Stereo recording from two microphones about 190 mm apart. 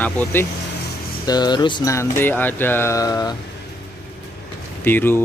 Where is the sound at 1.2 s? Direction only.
20° left (ahead or behind).